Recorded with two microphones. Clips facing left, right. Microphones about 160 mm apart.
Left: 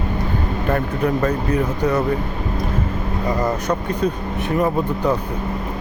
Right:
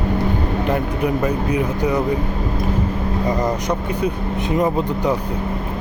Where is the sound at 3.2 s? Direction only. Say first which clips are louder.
Left 1 dB; 20° right (ahead or behind).